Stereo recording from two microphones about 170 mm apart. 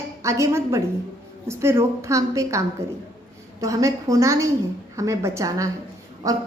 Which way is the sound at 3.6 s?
20° right (ahead or behind).